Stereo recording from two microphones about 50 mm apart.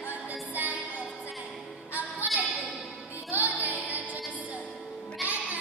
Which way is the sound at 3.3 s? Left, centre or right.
Right.